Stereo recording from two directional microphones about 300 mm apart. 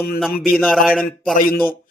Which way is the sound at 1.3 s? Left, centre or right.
Left.